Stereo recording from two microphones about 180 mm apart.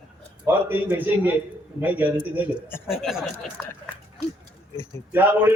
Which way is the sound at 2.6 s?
15° left (ahead or behind).